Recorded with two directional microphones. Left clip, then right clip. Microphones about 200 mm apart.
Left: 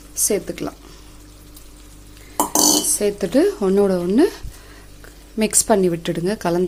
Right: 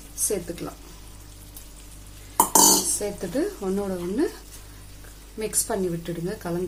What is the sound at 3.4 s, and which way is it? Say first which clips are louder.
Speech: left 11 dB; 40° left (ahead or behind).